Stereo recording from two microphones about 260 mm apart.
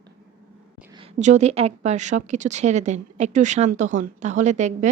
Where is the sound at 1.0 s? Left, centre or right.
Right.